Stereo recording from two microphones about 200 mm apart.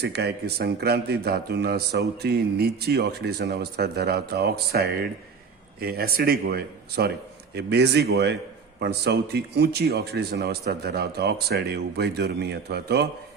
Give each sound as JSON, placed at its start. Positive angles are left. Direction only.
{"t": 0.0, "sound": "a man's voice", "side_deg": -55}